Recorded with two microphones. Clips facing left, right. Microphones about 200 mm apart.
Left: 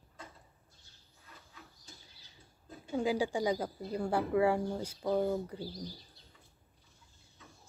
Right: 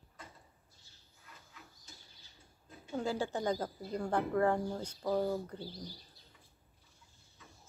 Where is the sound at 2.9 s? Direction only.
15° left (ahead or behind).